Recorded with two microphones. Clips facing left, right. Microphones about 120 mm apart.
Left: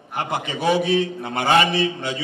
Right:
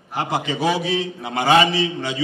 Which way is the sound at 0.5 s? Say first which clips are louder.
Left 3 dB; 55° left (ahead or behind).